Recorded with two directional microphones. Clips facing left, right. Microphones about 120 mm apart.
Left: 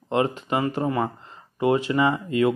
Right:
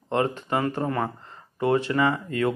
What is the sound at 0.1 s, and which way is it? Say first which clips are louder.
Speech: left 1 dB; 15° left (ahead or behind).